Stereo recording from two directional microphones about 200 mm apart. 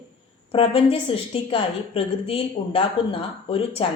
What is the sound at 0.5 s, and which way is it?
A woman's voice, 25° left (ahead or behind).